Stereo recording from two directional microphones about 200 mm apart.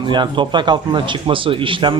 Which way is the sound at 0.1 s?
25° right (ahead or behind).